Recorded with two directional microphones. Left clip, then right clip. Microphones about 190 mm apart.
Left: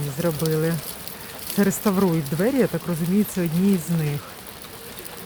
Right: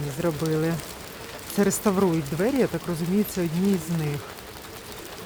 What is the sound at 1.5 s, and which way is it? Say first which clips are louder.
Speech: left 1 dB; 5° left (ahead or behind).